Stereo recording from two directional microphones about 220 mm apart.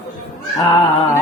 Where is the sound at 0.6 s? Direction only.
15° left (ahead or behind).